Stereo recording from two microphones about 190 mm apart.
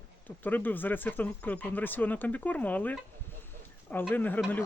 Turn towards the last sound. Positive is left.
turn(degrees=10)  # may be behind; listen again after turning